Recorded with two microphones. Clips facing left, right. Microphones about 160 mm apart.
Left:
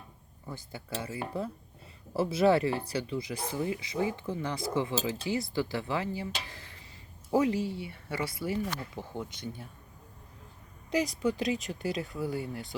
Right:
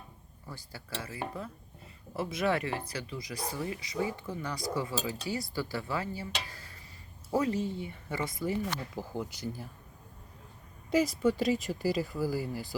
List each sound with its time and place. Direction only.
0.4 s speech: 20° left (ahead or behind)
7.3 s speech: 15° left (ahead or behind); by 9.6 s 5° right (ahead or behind)
10.9 s speech: 5° right (ahead or behind)